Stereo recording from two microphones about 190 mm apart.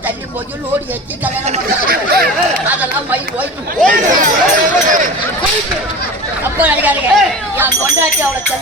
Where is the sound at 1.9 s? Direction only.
50° right (ahead or behind).